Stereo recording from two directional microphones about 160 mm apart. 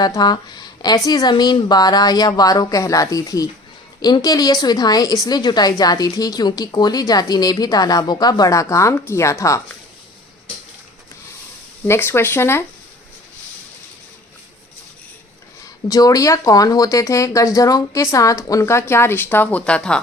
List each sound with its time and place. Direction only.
0.0 s a woman's voice: 25° left (ahead or behind)
11.9 s speech: 15° left (ahead or behind)
15.9 s a woman's voice: 20° left (ahead or behind); by 20.0 s 5° left (ahead or behind)